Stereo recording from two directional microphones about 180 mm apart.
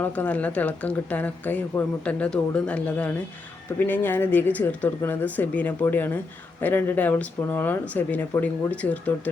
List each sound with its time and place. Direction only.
0.0 s speech: 10° left (ahead or behind)